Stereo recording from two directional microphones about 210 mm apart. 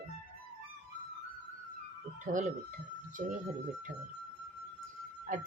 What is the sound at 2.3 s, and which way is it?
Speech, 35° right (ahead or behind).